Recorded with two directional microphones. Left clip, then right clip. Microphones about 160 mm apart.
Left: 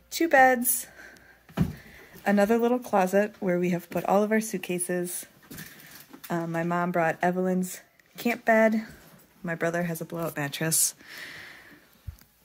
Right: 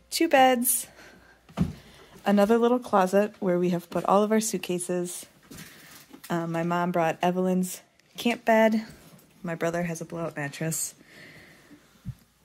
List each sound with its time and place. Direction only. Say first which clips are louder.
0.1 s speech: even; 15° right (ahead or behind)
2.2 s speech: right 1 dB; 15° right (ahead or behind)
4.8 s speech: even; 10° right (ahead or behind)
10.0 s speech: left 1 dB; 20° left (ahead or behind)
10.6 s speech: left 4 dB; 45° left (ahead or behind)